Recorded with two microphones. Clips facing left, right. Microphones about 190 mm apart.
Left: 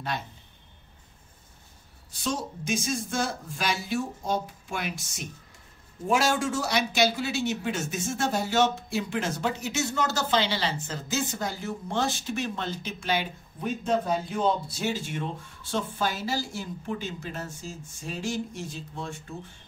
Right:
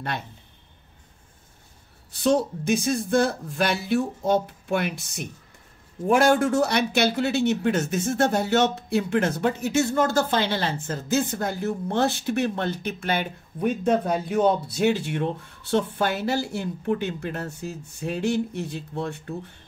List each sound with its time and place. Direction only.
2.2 s speech: 60° right (ahead or behind)